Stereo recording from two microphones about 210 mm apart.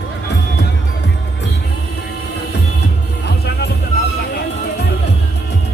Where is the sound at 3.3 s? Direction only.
50° left (ahead or behind).